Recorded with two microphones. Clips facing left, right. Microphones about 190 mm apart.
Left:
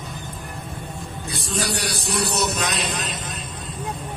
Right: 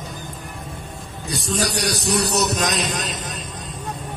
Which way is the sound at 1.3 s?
40° right (ahead or behind).